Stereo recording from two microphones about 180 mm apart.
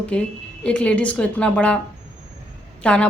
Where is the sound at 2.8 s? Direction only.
5° left (ahead or behind).